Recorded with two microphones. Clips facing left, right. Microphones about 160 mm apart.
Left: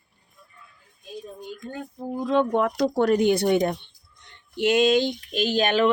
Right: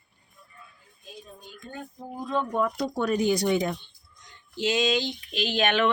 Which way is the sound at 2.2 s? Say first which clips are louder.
Left 5 dB; 90° left.